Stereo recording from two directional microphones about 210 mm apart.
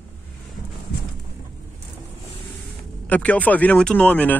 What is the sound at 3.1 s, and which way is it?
Speech, 5° left (ahead or behind).